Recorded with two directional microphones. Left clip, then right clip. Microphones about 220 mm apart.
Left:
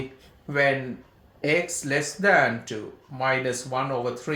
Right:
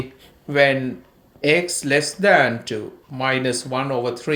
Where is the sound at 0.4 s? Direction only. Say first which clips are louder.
Right 6 dB; 40° right (ahead or behind).